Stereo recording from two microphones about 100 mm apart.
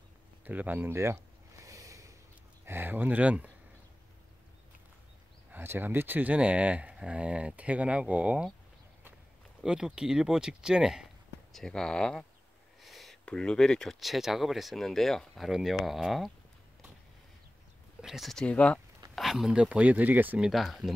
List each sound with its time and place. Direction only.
0.5 s a sound: 20° right (ahead or behind); by 2.1 s 35° right (ahead or behind)
2.6 s speech: 20° right (ahead or behind)
5.5 s speech: 20° right (ahead or behind)
9.6 s speech: 5° right (ahead or behind)
11.5 s speech: 5° left (ahead or behind)
18.0 s speech: centre (ahead or behind)
19.1 s speech: centre (ahead or behind)
20.3 s speech: 5° right (ahead or behind)